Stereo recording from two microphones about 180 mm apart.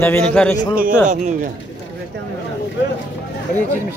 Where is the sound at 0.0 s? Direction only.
10° left (ahead or behind).